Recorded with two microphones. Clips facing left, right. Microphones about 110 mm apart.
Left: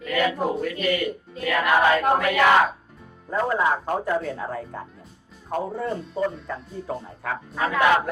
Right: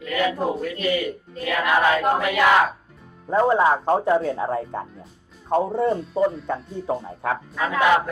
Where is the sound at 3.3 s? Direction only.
30° right (ahead or behind).